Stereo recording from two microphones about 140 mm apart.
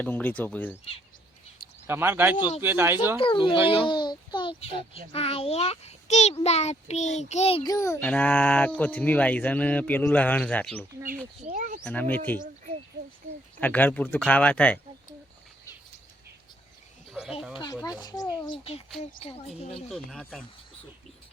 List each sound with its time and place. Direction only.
0.0 s speech: 10° left (ahead or behind)
1.9 s speech: 15° right (ahead or behind)
3.2 s a child's voice: 40° left (ahead or behind)
7.6 s a child's voice: 25° left (ahead or behind)
8.0 s speech: 10° left (ahead or behind)
11.4 s speech: 65° right (ahead or behind)
11.9 s speech: 15° left (ahead or behind)
13.6 s speech: 10° left (ahead or behind)
17.1 s a sound: 5° right (ahead or behind)
17.5 s a child's voice: 30° left (ahead or behind)
18.4 s a child's voice: 40° left (ahead or behind)
19.9 s speech: centre (ahead or behind)